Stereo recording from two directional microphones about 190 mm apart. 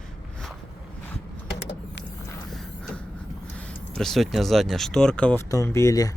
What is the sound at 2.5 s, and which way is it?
Vehicle, centre (ahead or behind).